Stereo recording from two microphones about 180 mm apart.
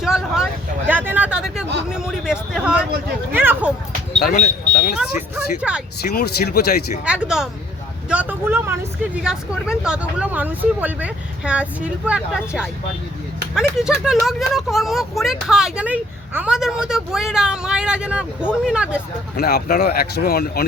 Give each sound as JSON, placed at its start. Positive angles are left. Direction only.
{"t": 0.0, "sound": "speech", "side_deg": -5}
{"t": 4.2, "sound": "speech", "side_deg": 50}
{"t": 4.9, "sound": "speech", "side_deg": -10}
{"t": 6.0, "sound": "speech", "side_deg": 60}
{"t": 7.0, "sound": "speech", "side_deg": -5}
{"t": 13.7, "sound": "speech", "side_deg": -5}
{"t": 19.4, "sound": "speech", "side_deg": 60}